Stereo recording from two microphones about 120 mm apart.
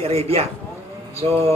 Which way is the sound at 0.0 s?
55° right (ahead or behind).